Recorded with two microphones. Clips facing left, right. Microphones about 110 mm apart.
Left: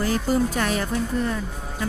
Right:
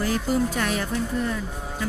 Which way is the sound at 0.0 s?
35° left (ahead or behind).